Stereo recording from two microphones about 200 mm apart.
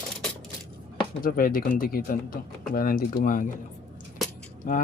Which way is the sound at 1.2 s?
45° left (ahead or behind).